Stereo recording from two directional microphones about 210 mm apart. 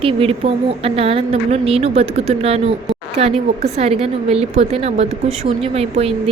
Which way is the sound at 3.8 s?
30° right (ahead or behind).